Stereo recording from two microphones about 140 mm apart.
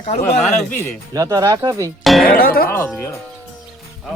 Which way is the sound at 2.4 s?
90° left.